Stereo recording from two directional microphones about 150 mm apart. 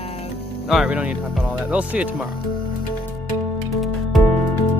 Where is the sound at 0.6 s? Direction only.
Centre (ahead or behind).